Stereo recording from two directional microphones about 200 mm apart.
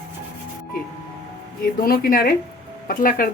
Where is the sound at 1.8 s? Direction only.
45° left (ahead or behind).